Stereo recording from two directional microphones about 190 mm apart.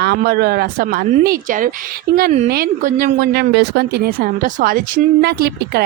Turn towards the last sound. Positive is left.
turn(degrees=-55)  # may be behind; listen again after turning